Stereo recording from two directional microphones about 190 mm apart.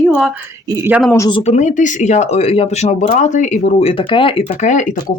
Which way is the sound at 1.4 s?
35° left (ahead or behind).